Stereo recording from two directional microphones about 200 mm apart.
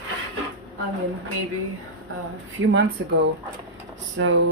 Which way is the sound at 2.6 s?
65° right (ahead or behind).